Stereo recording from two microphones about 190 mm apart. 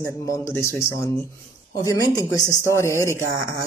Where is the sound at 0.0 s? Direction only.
15° left (ahead or behind).